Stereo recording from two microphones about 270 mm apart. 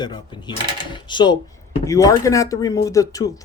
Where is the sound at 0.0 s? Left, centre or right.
Centre.